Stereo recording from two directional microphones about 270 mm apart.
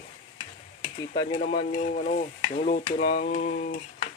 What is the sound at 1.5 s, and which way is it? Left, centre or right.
Speech, left.